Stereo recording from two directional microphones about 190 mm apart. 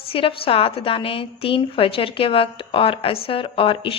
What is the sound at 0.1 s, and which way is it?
A woman's voice, 30° left (ahead or behind).